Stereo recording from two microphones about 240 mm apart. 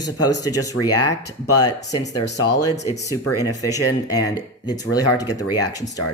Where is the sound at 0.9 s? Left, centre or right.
Left.